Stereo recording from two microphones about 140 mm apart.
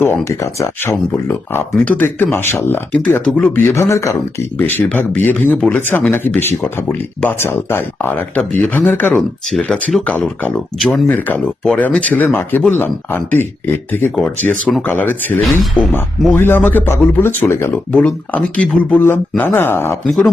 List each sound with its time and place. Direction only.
0.0 s speech: 20° left (ahead or behind)
20.1 s speech: centre (ahead or behind)